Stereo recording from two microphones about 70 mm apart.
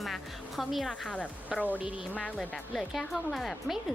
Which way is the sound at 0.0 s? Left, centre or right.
Centre.